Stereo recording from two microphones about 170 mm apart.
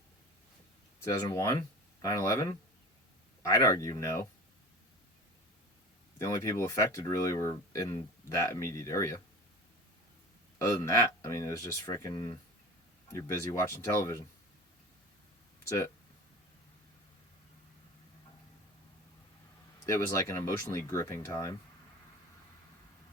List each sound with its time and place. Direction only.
0.9 s speech: 20° left (ahead or behind)
6.1 s speech: 15° left (ahead or behind)
10.6 s speech: 15° left (ahead or behind)
19.8 s speech: 15° left (ahead or behind)